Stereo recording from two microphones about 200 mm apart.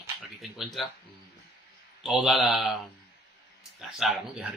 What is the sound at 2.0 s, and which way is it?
Speech, centre (ahead or behind).